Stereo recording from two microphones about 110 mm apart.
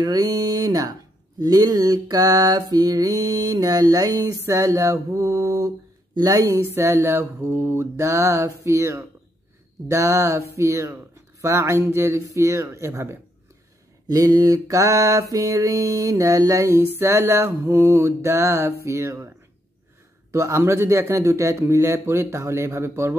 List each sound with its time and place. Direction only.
0.0 s a sound: 35° right (ahead or behind)
6.1 s mantra: 35° right (ahead or behind)
14.0 s mantra: 35° right (ahead or behind)